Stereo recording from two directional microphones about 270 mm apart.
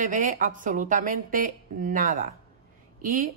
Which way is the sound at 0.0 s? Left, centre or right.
Right.